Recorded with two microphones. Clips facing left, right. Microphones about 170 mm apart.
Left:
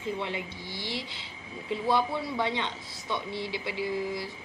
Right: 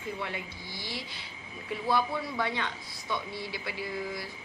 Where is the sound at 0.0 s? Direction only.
20° left (ahead or behind).